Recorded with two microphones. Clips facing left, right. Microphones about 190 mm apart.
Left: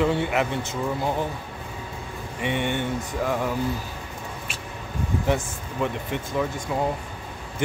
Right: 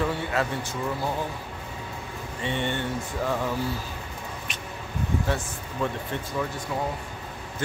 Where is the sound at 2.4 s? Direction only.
15° left (ahead or behind).